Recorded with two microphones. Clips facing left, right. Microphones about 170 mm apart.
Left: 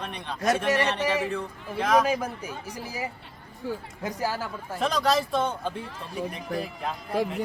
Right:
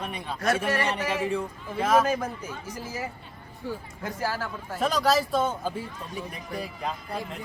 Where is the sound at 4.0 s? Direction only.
15° left (ahead or behind).